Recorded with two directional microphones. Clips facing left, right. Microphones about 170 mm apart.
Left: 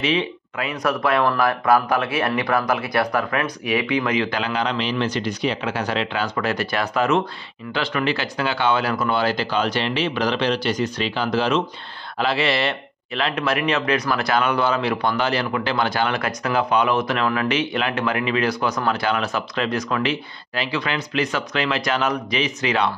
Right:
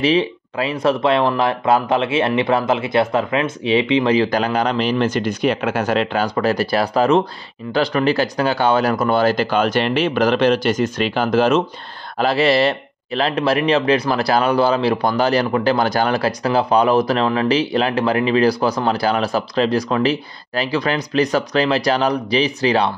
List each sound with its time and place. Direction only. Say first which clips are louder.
0.0 s speech: right 6 dB; 35° right (ahead or behind)